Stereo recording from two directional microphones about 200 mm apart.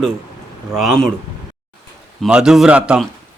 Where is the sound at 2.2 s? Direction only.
5° right (ahead or behind).